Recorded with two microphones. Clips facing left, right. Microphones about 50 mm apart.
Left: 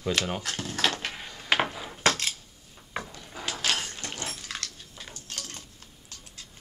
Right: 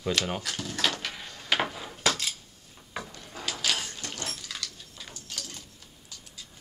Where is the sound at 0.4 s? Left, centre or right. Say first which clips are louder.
Left 1 dB; left.